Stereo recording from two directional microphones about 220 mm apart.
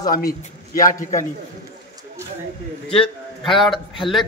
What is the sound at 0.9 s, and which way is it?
Speech, 35° left (ahead or behind).